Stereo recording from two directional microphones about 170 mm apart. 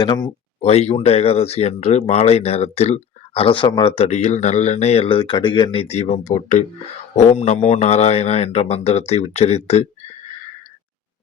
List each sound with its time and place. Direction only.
0.0 s speech: 25° left (ahead or behind)
0.6 s speech: 35° left (ahead or behind)